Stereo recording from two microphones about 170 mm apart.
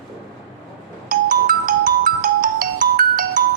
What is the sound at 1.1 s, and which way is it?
Ringtone, 55° right (ahead or behind).